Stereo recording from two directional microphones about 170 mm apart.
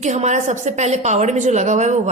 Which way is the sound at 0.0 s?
45° right (ahead or behind).